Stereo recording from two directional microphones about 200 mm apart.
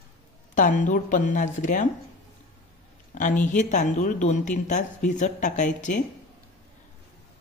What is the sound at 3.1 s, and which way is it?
A man's voice, 40° left (ahead or behind).